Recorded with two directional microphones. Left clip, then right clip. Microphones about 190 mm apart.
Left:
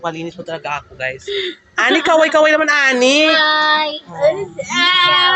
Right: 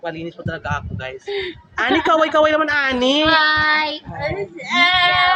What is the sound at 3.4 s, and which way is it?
Child singing, 25° right (ahead or behind).